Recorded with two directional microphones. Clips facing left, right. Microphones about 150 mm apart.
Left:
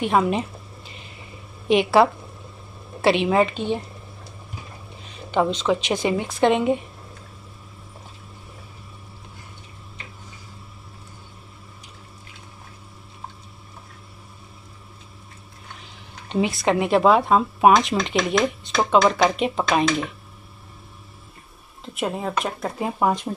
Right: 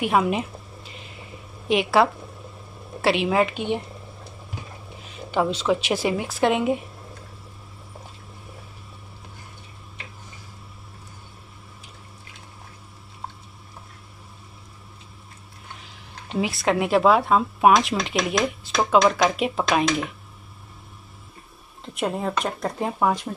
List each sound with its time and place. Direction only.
0.0 s a sound: 5° right (ahead or behind)
1.7 s speech: centre (ahead or behind)
5.3 s a woman's voice: 5° right (ahead or behind)
16.3 s speech: 5° right (ahead or behind)
21.8 s speech: centre (ahead or behind)
23.3 s speech: 15° left (ahead or behind)